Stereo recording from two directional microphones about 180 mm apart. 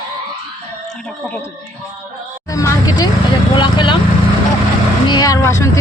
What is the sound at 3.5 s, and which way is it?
Speech, 25° left (ahead or behind).